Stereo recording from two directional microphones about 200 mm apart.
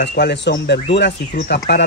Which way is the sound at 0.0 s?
55° left (ahead or behind).